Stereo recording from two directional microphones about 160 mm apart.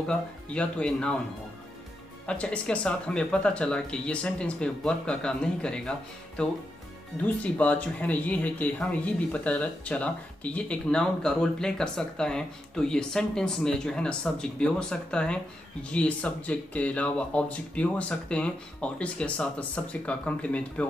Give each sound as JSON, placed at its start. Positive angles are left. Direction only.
{"t": 0.0, "sound": "speech", "side_deg": 5}
{"t": 2.2, "sound": "speech", "side_deg": 5}